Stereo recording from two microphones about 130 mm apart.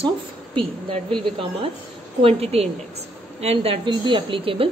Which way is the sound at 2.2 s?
45° right (ahead or behind).